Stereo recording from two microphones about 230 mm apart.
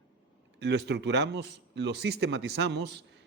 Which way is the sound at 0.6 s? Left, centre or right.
Right.